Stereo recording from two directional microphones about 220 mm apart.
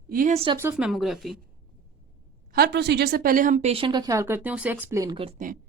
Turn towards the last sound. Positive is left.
turn(degrees=-35)  # may be behind; listen again after turning